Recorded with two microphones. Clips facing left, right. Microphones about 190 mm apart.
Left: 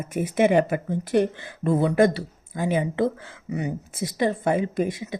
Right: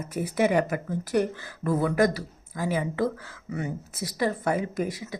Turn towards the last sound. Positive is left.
turn(degrees=25)  # may be behind; listen again after turning